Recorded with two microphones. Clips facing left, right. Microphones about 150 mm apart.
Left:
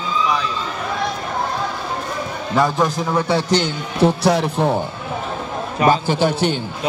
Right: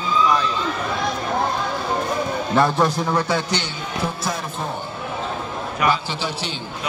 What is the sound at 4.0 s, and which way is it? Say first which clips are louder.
Speech: left 12 dB; 70° left (ahead or behind).